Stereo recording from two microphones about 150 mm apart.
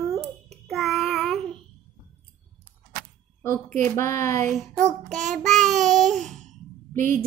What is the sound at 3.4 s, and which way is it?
A woman's voice, 20° left (ahead or behind).